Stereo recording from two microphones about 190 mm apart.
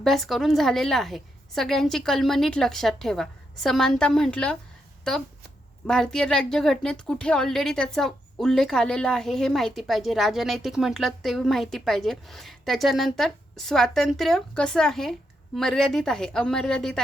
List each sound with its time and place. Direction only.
0.0 s a woman's voice: centre (ahead or behind)
5.8 s a woman's voice: 5° left (ahead or behind)